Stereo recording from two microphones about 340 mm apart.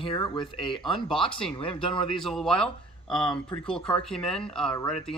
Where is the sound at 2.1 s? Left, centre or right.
Centre.